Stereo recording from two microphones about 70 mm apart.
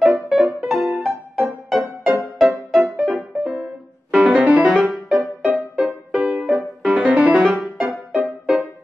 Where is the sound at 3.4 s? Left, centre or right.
Centre.